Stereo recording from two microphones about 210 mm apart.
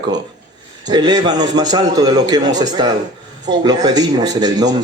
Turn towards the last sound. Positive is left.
turn(degrees=-20)  # may be behind; listen again after turning